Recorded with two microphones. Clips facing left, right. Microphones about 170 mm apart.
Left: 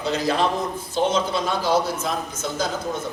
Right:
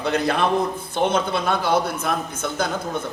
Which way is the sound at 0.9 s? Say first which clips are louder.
Even; 60° right (ahead or behind).